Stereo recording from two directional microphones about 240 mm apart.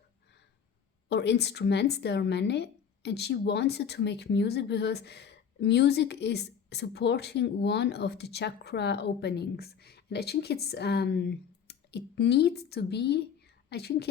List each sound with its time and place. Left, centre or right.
1.0 s a woman's voice: left